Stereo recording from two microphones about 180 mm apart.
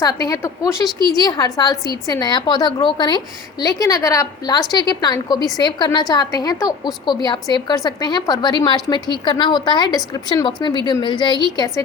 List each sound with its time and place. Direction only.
0.0 s a woman's voice: 20° left (ahead or behind)